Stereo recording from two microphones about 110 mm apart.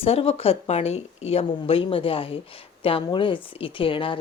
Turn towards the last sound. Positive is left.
turn(degrees=50)  # may be behind; listen again after turning